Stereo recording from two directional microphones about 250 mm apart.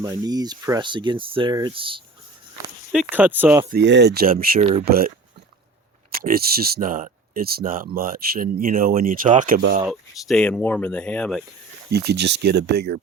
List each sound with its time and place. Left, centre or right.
0.0 s speech: centre
2.9 s speech: centre
3.7 s speech: right
6.2 s speech: right
9.6 s speech: right
9.9 s speech: centre
11.9 s speech: right